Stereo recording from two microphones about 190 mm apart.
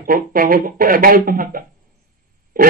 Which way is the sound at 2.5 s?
45° right (ahead or behind).